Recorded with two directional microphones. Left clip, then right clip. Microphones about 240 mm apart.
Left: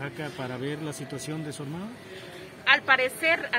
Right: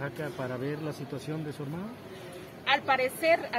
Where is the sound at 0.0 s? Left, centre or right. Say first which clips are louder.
Even; left.